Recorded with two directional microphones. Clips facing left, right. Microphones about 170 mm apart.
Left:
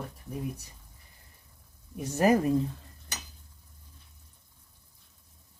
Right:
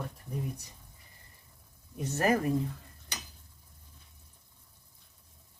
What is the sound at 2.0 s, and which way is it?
Speech, 15° left (ahead or behind).